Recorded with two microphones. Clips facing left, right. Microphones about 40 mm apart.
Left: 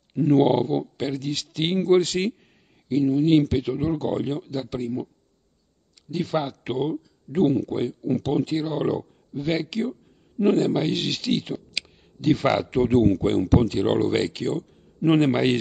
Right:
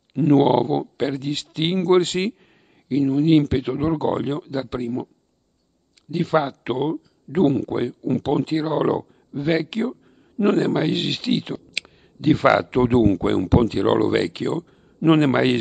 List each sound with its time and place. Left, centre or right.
0.1 s speech: right
6.0 s speech: right
7.4 s speech: right
8.5 s speech: right
9.7 s speech: right